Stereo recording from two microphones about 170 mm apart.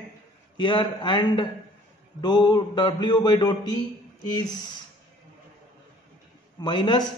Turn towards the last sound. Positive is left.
turn(degrees=25)  # may be behind; listen again after turning